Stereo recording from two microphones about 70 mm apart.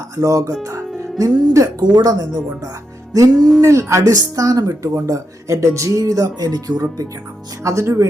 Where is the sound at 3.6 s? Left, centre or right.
Right.